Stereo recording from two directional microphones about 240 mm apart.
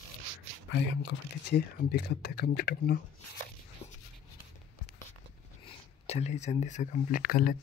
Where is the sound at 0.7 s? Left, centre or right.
Left.